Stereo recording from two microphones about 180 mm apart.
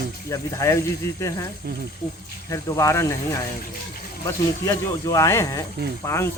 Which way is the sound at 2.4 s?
15° left (ahead or behind).